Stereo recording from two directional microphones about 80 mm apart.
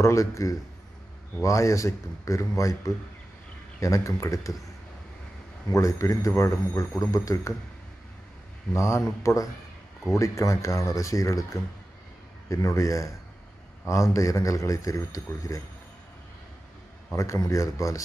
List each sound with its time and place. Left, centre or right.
0.0 s speech: left
5.7 s speech: left
8.7 s speech: left
12.4 s speech: left
17.1 s speech: left